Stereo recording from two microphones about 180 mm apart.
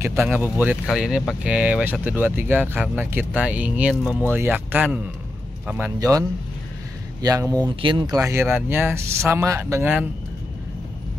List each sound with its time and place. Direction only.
0.0 s speech: 15° right (ahead or behind)
5.9 s speech: 20° right (ahead or behind)